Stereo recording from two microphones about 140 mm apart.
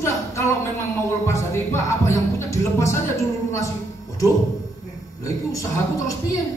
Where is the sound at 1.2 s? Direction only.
20° left (ahead or behind).